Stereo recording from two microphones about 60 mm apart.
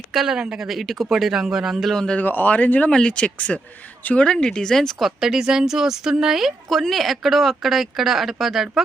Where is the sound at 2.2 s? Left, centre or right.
Left.